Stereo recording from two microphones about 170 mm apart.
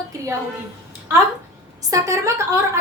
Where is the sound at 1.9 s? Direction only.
20° right (ahead or behind).